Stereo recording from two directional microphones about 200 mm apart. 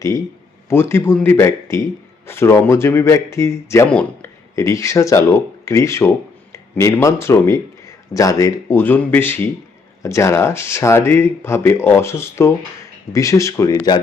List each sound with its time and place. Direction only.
0.7 s a man's voice: 10° left (ahead or behind)